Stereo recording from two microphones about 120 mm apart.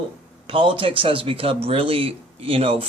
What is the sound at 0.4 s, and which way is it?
Speech, 50° right (ahead or behind).